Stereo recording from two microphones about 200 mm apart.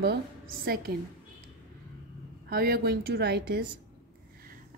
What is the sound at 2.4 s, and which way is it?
A woman's voice, 50° right (ahead or behind).